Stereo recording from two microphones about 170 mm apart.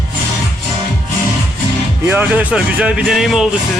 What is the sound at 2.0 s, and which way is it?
Speech, 10° right (ahead or behind).